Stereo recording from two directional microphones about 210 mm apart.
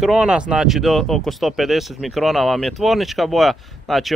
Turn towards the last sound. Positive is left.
turn(degrees=0)  # may be behind; listen again after turning